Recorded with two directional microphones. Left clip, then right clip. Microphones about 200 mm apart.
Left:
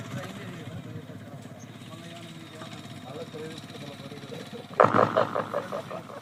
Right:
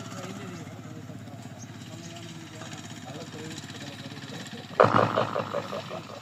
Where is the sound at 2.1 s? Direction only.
50° left (ahead or behind).